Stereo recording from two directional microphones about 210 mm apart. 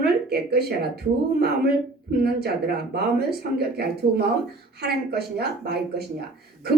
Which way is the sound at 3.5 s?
50° right (ahead or behind).